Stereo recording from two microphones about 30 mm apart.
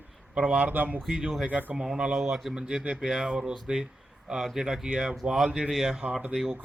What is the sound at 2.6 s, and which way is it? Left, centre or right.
Speech, right.